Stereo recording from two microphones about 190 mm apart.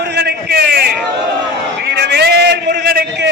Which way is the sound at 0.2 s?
60° right (ahead or behind).